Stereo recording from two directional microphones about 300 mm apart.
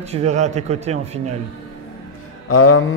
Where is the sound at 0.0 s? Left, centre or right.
Right.